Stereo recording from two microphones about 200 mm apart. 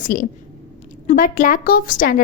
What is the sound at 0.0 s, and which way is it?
A woman's voice, 40° left (ahead or behind).